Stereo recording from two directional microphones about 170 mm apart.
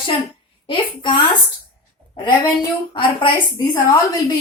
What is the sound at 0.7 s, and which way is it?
Speech, 30° left (ahead or behind).